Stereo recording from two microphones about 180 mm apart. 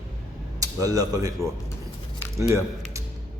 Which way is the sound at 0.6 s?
20° right (ahead or behind).